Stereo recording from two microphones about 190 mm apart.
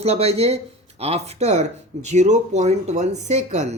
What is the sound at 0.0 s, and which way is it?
Speech, 30° right (ahead or behind).